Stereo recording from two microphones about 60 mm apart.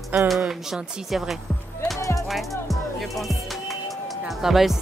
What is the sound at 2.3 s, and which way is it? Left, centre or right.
Music, centre.